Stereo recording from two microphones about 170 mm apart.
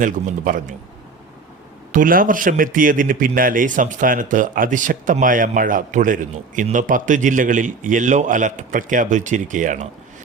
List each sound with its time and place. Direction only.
0.0 s a man's voice: 50° right (ahead or behind)
1.9 s a man's voice: 55° right (ahead or behind)